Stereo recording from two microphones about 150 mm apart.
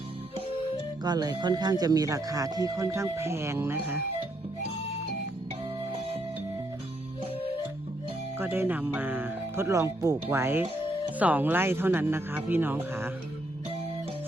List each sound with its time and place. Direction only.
1.0 s speech: 25° right (ahead or behind)
8.4 s speech: 15° right (ahead or behind)